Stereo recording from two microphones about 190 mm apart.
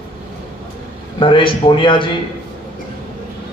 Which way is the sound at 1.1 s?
25° left (ahead or behind).